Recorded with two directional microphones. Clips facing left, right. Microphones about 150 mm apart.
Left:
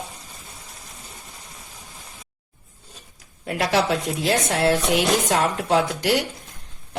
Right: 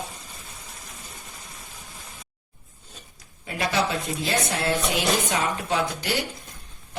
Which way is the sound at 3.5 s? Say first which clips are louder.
Left 4 dB; 70° left (ahead or behind).